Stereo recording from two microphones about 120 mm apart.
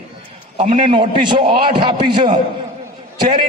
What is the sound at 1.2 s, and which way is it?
A man's voice, 45° right (ahead or behind).